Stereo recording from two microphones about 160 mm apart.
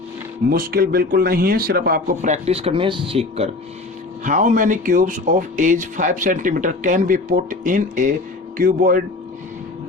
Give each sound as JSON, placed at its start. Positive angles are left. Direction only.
{"t": 0.5, "sound": "speech", "side_deg": -65}
{"t": 2.2, "sound": "speech", "side_deg": -45}
{"t": 4.2, "sound": "speech", "side_deg": -50}